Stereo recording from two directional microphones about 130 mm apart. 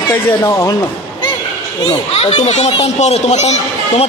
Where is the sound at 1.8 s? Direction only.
45° left (ahead or behind).